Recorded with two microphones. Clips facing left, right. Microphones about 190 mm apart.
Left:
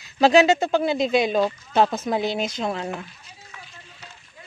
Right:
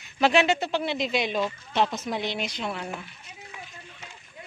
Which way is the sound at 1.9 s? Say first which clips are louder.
Left 6 dB; 50° left (ahead or behind).